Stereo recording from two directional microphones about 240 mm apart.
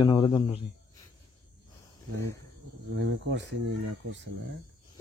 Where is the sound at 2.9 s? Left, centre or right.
Right.